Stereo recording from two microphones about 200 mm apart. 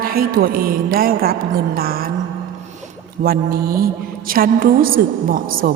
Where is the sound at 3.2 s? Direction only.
50° right (ahead or behind).